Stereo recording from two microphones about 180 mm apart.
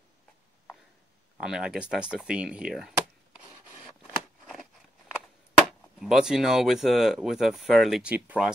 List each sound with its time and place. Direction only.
1.4 s speech: 5° right (ahead or behind)
4.2 s a sound: centre (ahead or behind)
5.7 s speech: centre (ahead or behind)